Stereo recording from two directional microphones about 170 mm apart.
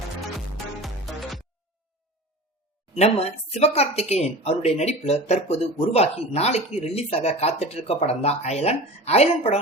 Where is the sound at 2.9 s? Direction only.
35° left (ahead or behind).